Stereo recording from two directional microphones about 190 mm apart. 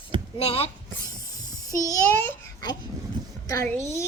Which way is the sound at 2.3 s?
20° left (ahead or behind).